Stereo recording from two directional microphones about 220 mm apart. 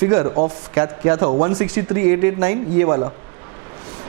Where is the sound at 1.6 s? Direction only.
15° right (ahead or behind).